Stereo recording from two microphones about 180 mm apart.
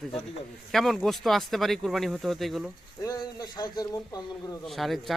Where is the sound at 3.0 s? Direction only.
20° left (ahead or behind).